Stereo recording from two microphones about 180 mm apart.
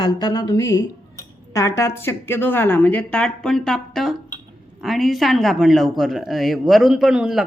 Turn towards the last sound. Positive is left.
turn(degrees=-5)  # may be behind; listen again after turning